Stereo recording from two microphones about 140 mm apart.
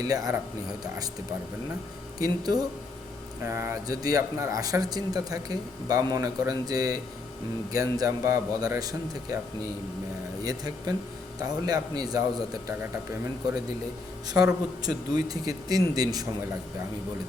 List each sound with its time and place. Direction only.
0.0 s speech: 25° right (ahead or behind)
2.1 s speech: 25° right (ahead or behind)
10.4 s speech: 25° right (ahead or behind)
14.3 s speech: 25° right (ahead or behind)